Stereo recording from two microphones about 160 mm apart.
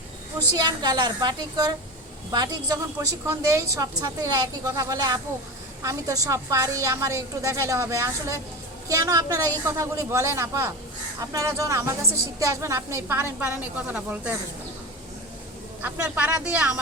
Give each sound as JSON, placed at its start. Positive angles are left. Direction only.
{"t": 0.5, "sound": "a woman's voice", "side_deg": -25}
{"t": 15.8, "sound": "a woman's voice", "side_deg": -10}